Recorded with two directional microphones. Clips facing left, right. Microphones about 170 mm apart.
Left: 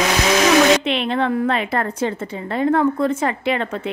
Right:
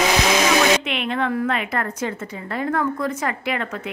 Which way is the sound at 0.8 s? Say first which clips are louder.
Left 4 dB; 30° left (ahead or behind).